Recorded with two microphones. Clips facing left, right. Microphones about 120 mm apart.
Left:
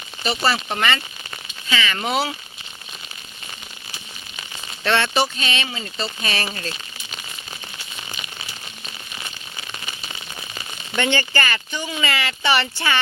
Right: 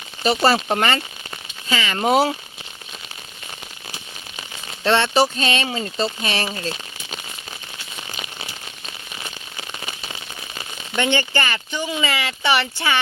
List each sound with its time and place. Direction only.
0.2 s speech: 40° right (ahead or behind)
2.0 s speech: 40° right (ahead or behind)
4.8 s speech: 25° right (ahead or behind)
5.2 s speech: 45° right (ahead or behind)
6.2 s speech: 20° right (ahead or behind)
10.9 s speech: 15° right (ahead or behind)